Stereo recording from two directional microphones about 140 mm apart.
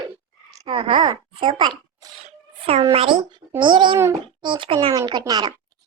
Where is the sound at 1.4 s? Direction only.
35° right (ahead or behind).